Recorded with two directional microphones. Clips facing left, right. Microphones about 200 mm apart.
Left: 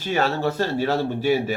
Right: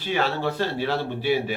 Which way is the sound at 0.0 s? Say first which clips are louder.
Left 2 dB; 45° left (ahead or behind).